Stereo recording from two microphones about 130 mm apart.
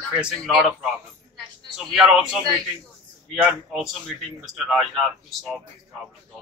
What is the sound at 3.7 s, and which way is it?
Speech, centre (ahead or behind).